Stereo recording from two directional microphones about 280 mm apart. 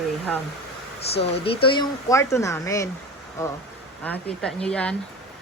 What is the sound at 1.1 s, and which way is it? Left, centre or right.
Speech, left.